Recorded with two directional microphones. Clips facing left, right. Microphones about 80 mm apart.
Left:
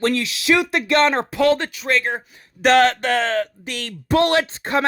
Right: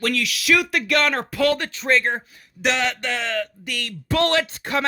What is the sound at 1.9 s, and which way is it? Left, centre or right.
Speech, centre.